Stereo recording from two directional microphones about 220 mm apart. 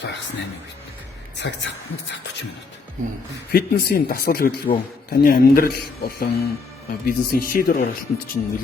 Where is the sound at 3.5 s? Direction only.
45° left (ahead or behind).